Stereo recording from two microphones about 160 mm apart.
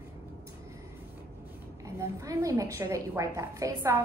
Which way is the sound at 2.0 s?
20° right (ahead or behind).